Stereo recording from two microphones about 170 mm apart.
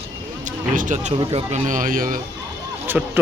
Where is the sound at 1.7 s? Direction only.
50° right (ahead or behind).